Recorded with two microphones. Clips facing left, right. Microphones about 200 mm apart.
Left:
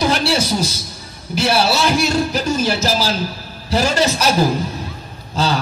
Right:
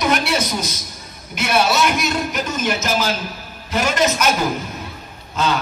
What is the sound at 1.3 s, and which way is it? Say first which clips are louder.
A man's voice: left 2 dB; 30° left (ahead or behind).